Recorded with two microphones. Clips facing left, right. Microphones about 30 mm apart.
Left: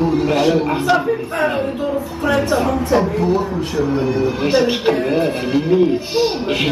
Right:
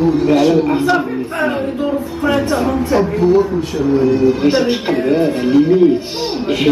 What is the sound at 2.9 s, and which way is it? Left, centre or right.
Speech, centre.